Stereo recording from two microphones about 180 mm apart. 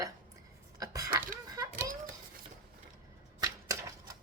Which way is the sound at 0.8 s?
20° right (ahead or behind).